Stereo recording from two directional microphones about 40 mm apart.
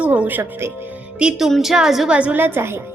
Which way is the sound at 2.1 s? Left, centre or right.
Right.